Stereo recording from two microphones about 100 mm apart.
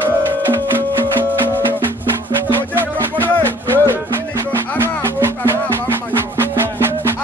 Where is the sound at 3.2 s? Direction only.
20° left (ahead or behind).